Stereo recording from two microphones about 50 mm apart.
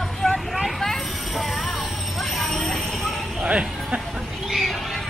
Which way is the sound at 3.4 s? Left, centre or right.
Right.